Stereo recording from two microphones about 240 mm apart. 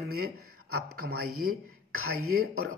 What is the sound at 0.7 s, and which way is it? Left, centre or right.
Speech, right.